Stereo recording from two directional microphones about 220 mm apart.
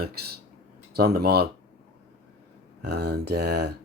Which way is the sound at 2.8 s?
50° right (ahead or behind).